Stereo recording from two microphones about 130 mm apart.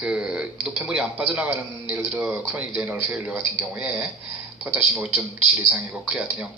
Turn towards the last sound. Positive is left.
turn(degrees=-10)  # may be behind; listen again after turning